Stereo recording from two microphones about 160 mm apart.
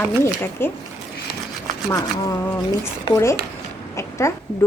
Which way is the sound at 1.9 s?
20° left (ahead or behind).